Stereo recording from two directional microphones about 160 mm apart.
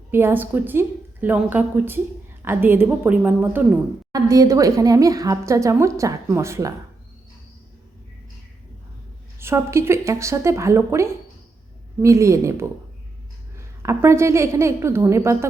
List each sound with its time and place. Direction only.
0.1 s a woman's voice: 15° right (ahead or behind)
4.1 s a woman's voice: 20° right (ahead or behind)
9.4 s a woman's voice: 15° right (ahead or behind)